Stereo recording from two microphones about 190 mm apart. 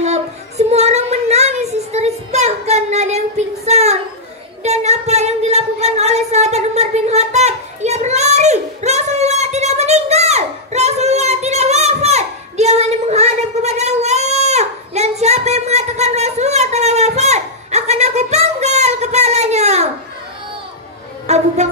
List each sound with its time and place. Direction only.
0.0 s child singing: 35° right (ahead or behind)
4.6 s singing: 35° right (ahead or behind)
21.3 s a sound: 35° right (ahead or behind)